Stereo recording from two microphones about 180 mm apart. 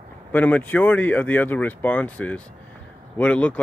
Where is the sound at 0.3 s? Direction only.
10° left (ahead or behind).